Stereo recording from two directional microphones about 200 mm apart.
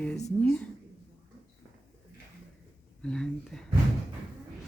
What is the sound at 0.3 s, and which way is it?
Speech, 5° left (ahead or behind).